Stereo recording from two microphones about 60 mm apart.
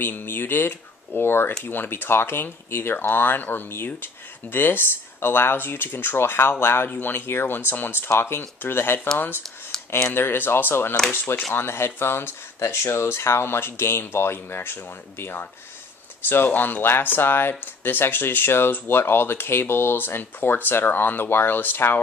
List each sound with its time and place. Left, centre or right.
0.0 s speech: left